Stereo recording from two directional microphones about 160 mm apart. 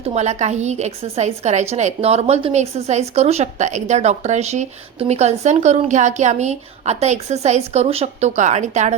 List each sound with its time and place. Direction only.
0.0 s a woman's voice: 45° right (ahead or behind)